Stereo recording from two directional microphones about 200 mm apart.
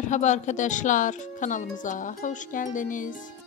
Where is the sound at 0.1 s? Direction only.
35° left (ahead or behind).